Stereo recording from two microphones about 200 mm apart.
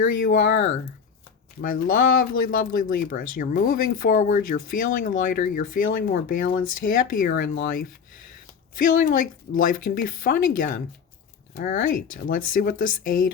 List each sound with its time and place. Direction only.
0.0 s speech: 45° left (ahead or behind)
8.8 s speech: 45° left (ahead or behind)